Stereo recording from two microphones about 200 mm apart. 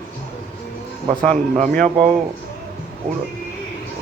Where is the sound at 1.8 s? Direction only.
30° right (ahead or behind).